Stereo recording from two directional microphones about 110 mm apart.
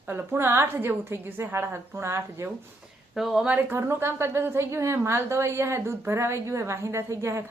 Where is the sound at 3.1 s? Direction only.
Centre (ahead or behind).